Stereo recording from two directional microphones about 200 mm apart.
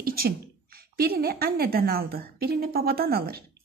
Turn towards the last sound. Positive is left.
turn(degrees=-50)  # may be behind; listen again after turning